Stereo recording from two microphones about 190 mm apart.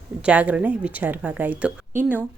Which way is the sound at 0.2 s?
5° right (ahead or behind).